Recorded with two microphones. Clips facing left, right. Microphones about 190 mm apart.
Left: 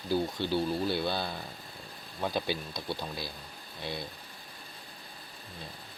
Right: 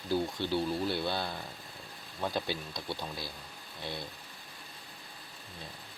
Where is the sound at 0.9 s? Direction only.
5° left (ahead or behind).